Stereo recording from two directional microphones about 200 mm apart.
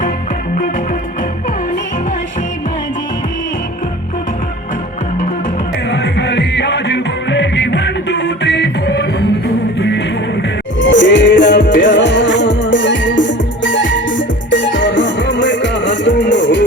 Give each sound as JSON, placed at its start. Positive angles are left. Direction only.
{"t": 5.9, "sound": "music", "side_deg": 55}
{"t": 10.8, "sound": "music", "side_deg": 65}